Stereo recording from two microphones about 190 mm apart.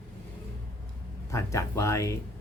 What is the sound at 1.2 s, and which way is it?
Speech, 15° left (ahead or behind).